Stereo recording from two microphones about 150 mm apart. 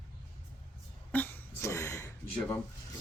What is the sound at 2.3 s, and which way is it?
Speech, 10° left (ahead or behind).